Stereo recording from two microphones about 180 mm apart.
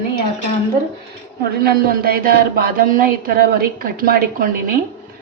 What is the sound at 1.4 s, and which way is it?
A woman's voice, 60° right (ahead or behind).